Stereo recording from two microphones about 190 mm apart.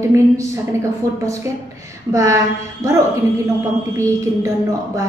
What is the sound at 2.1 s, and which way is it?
Speech, 15° right (ahead or behind).